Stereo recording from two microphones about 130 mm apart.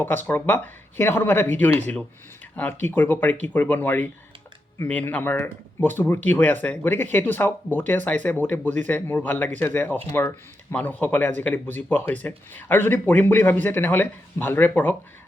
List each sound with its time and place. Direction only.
0.0 s speech: 15° left (ahead or behind)
2.6 s speech: 15° left (ahead or behind)